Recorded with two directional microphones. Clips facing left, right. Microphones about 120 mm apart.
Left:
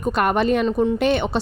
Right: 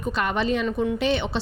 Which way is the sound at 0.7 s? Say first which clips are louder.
Left 5 dB; 30° left (ahead or behind).